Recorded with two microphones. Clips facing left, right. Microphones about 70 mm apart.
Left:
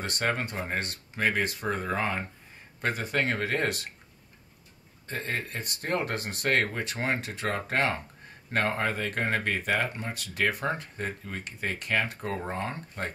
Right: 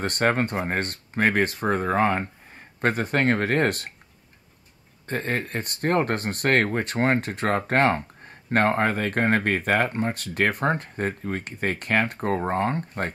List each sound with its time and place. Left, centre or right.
0.0 s speech: right
5.0 s speech: right